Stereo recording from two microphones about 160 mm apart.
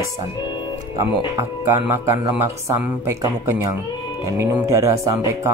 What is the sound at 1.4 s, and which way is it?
Speech, 15° right (ahead or behind).